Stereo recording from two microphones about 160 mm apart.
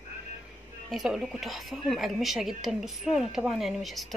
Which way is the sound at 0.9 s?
Centre (ahead or behind).